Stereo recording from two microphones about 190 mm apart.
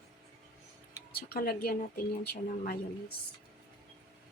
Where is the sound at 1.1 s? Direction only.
55° left (ahead or behind).